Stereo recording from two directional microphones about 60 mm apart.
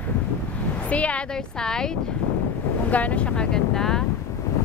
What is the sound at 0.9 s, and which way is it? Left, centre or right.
Speech, left.